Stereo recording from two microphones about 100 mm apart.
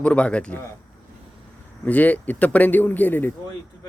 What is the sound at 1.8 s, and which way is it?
A man's voice, 15° left (ahead or behind).